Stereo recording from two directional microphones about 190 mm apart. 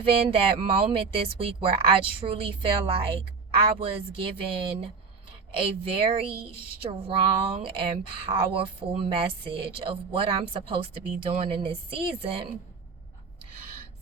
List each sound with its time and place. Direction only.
0.0 s speech: 30° right (ahead or behind)